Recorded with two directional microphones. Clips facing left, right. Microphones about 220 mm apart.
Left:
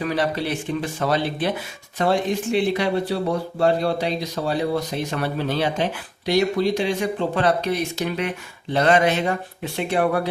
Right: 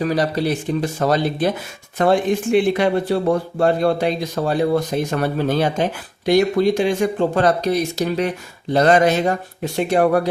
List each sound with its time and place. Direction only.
0.0 s speech: 40° right (ahead or behind)